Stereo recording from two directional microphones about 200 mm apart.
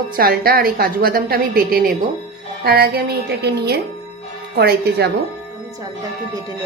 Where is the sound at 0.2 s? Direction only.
50° right (ahead or behind).